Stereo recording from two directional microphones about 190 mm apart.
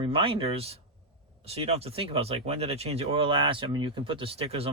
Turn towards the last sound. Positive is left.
turn(degrees=-30)  # may be behind; listen again after turning